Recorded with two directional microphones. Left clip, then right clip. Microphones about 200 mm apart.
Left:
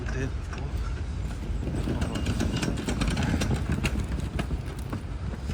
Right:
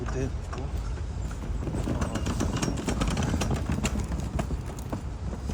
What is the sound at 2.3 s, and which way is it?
Vehicle, 55° right (ahead or behind).